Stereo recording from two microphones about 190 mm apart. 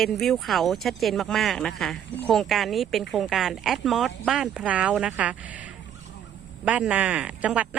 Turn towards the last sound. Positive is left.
turn(degrees=-5)  # may be behind; listen again after turning